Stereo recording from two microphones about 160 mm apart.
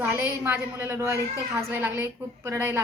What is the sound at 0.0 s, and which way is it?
A woman's voice, 10° right (ahead or behind).